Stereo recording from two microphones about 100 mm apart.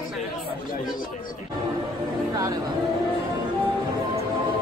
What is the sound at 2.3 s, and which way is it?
Speech, 40° right (ahead or behind).